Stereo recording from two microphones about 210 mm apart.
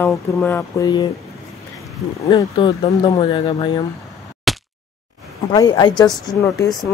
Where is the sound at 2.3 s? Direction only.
20° left (ahead or behind).